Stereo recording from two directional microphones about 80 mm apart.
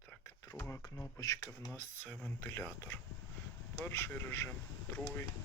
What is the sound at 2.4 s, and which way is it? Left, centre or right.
Speech, left.